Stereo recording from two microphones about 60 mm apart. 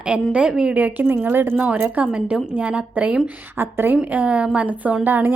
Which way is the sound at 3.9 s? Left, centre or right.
Right.